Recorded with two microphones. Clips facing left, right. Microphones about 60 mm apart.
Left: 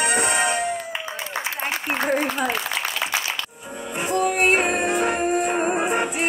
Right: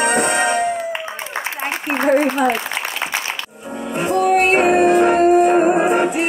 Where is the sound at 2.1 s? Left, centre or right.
Centre.